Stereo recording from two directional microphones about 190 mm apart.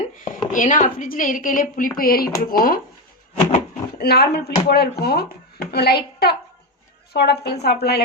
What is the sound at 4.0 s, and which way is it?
A woman's voice, 55° left (ahead or behind).